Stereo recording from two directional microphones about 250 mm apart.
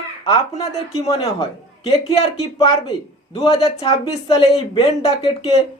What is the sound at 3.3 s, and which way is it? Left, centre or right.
Speech, left.